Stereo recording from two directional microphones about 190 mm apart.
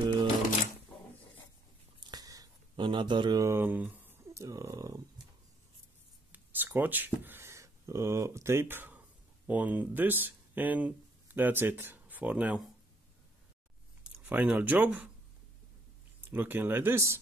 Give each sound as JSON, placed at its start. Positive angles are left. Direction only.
{"t": 2.0, "sound": "a sound", "side_deg": -20}
{"t": 6.3, "sound": "speech", "side_deg": -10}
{"t": 14.1, "sound": "speech", "side_deg": -10}
{"t": 16.3, "sound": "speech", "side_deg": -10}